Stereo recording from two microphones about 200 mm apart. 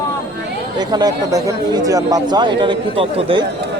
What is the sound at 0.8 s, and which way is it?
Speech, 20° right (ahead or behind).